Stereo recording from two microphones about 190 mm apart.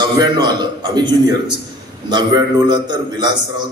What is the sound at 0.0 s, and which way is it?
A man's voice, 20° right (ahead or behind).